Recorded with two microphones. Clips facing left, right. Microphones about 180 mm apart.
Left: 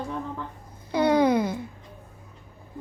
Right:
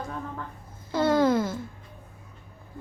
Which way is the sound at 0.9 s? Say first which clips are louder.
Left 1 dB; 15° left (ahead or behind).